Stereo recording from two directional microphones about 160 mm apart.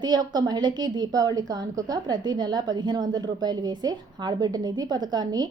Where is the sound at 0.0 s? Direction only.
25° right (ahead or behind).